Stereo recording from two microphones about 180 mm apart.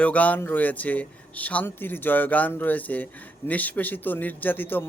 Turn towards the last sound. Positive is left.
turn(degrees=10)  # may be behind; listen again after turning